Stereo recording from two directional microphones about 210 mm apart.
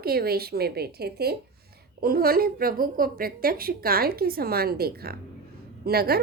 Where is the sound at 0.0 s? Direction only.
45° right (ahead or behind).